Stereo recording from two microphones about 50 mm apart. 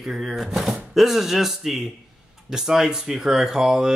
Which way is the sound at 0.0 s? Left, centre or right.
Centre.